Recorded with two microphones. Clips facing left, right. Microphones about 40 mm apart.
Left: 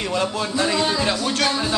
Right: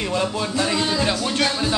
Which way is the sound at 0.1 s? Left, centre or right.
Centre.